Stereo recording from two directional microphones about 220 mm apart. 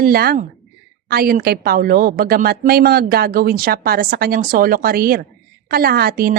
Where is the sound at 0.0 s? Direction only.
45° right (ahead or behind).